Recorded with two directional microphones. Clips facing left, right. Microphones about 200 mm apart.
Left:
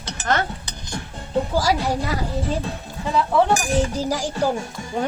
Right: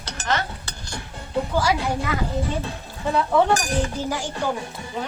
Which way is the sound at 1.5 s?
35° left (ahead or behind).